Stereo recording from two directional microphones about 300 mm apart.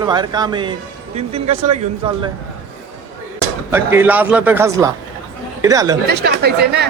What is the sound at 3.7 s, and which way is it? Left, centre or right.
Speech, centre.